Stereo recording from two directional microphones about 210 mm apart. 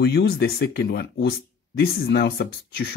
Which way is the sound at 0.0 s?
50° left (ahead or behind).